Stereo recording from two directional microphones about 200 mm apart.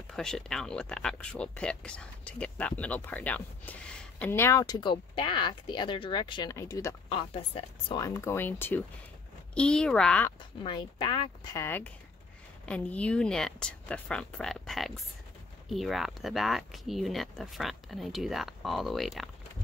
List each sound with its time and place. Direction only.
0.1 s speech: 5° left (ahead or behind); by 8.0 s 25° left (ahead or behind)
8.0 s speech: 15° left (ahead or behind)
10.6 s speech: 25° left (ahead or behind); by 19.3 s centre (ahead or behind)